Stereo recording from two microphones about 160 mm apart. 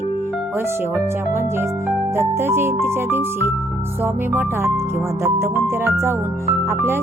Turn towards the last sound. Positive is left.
turn(degrees=-15)  # may be behind; listen again after turning